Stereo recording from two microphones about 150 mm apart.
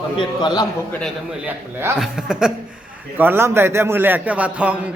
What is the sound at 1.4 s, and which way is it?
A man's voice, 10° right (ahead or behind).